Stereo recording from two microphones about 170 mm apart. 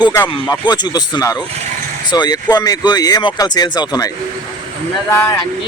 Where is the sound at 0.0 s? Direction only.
15° left (ahead or behind).